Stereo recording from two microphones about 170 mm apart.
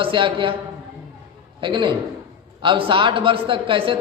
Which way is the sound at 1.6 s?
30° right (ahead or behind).